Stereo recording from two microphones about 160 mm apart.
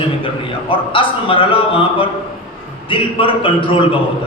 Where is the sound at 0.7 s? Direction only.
35° left (ahead or behind).